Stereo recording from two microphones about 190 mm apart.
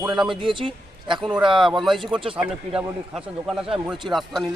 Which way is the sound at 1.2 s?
5° right (ahead or behind).